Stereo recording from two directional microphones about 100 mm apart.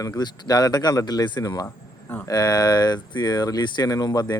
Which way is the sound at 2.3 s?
40° left (ahead or behind).